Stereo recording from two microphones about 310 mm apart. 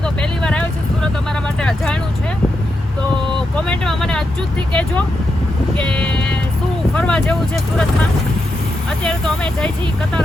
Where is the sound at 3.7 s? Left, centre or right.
Centre.